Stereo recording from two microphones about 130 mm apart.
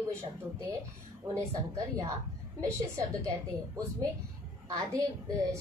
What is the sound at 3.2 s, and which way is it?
A woman's voice, 25° right (ahead or behind).